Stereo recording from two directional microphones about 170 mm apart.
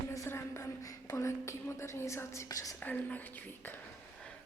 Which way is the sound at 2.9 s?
10° left (ahead or behind).